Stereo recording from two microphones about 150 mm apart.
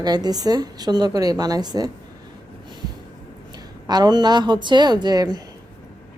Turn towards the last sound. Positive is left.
turn(degrees=-25)  # may be behind; listen again after turning